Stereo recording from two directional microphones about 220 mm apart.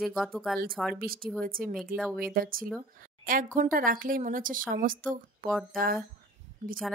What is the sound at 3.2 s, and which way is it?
A woman's voice, 40° right (ahead or behind).